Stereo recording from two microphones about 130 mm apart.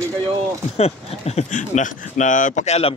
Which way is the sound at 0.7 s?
55° left (ahead or behind).